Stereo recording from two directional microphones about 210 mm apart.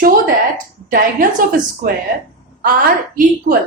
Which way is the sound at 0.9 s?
40° right (ahead or behind).